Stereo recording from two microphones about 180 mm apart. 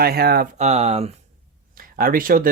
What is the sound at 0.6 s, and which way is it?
Speech, 35° right (ahead or behind).